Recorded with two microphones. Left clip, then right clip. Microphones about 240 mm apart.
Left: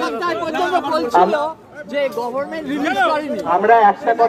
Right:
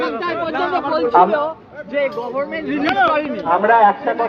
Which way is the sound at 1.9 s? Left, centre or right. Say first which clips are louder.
Even; left.